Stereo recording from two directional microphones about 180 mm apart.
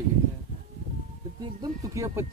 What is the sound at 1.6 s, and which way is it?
Speech, 20° right (ahead or behind).